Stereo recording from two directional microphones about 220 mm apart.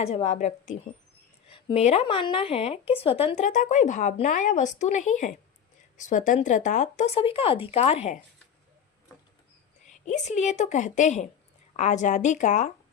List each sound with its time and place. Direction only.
0.0 s speech: 30° left (ahead or behind)
10.1 s speech: 30° left (ahead or behind)